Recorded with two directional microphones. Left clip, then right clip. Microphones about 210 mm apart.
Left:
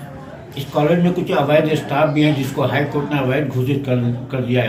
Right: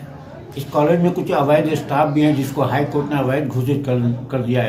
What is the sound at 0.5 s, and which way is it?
Speech, 35° right (ahead or behind).